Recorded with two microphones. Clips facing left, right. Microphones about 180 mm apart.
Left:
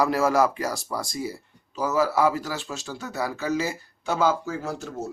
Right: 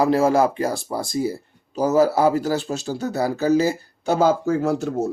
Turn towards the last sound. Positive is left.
turn(degrees=-60)  # may be behind; listen again after turning